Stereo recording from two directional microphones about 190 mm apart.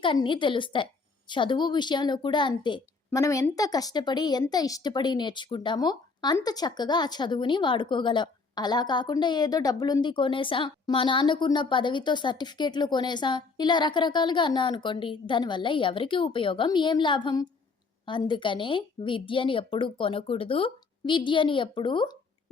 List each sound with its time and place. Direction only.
0.0 s a woman's voice: 25° left (ahead or behind)